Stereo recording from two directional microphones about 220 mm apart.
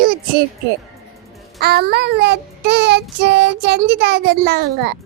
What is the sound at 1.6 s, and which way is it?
Child singing, 45° right (ahead or behind).